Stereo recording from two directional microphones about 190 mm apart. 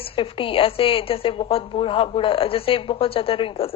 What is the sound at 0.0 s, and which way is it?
A woman's voice, 30° left (ahead or behind).